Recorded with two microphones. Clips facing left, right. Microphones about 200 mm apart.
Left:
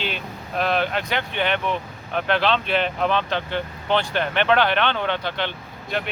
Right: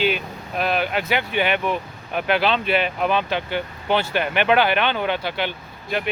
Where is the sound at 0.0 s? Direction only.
5° right (ahead or behind).